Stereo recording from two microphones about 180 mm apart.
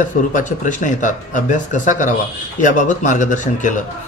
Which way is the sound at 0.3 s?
45° left (ahead or behind).